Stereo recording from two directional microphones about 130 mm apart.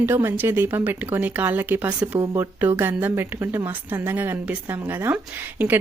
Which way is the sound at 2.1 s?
25° right (ahead or behind).